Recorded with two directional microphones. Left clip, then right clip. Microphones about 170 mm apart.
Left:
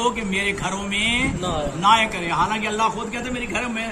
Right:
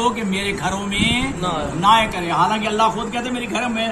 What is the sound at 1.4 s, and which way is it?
Speech, 65° left (ahead or behind).